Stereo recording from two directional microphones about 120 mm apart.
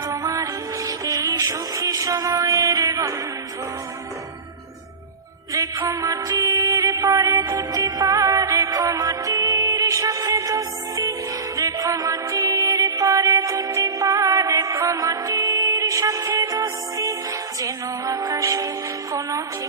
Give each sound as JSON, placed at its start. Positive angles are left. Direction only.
{"t": 0.1, "sound": "music", "side_deg": -25}
{"t": 5.5, "sound": "music", "side_deg": -30}